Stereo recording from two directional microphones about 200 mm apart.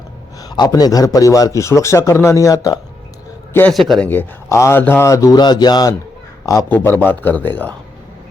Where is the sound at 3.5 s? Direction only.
5° left (ahead or behind).